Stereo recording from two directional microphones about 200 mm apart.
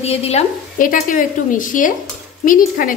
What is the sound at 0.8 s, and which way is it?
A woman's voice, 45° left (ahead or behind).